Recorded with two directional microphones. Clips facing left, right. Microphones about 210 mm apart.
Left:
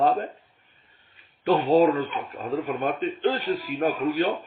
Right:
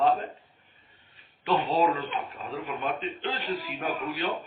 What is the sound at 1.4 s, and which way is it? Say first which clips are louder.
Speech: left 6 dB; 45° left (ahead or behind).